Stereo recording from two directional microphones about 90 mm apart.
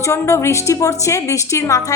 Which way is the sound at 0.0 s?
35° left (ahead or behind).